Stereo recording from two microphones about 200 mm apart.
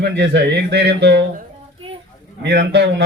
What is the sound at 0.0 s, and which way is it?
Speech, 55° right (ahead or behind).